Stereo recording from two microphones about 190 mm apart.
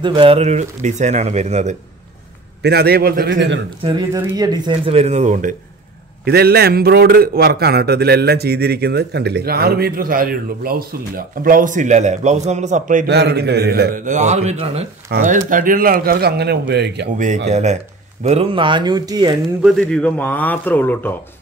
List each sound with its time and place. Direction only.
0.0 s speech: 25° right (ahead or behind)
2.6 s a man's voice: 55° right (ahead or behind)
3.8 s speech: 25° right (ahead or behind); by 5.6 s 40° right (ahead or behind)
6.2 s a man's voice: 55° right (ahead or behind)
13.0 s a man's voice: 60° right (ahead or behind)
14.0 s speech: 40° right (ahead or behind)
15.0 s a man's voice: 50° right (ahead or behind)
17.5 s speech: 35° right (ahead or behind); by 19.3 s 20° right (ahead or behind)
19.6 s a man's voice: centre (ahead or behind)